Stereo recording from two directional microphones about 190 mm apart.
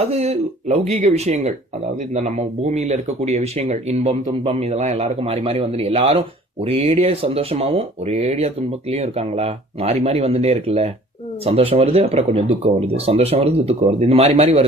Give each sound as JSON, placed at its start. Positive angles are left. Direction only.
{"t": 0.0, "sound": "speech", "side_deg": -35}